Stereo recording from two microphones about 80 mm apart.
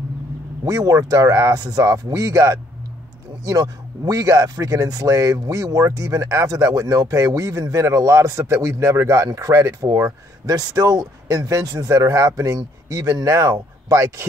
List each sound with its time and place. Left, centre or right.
0.7 s a man's voice: right
10.5 s a man's voice: right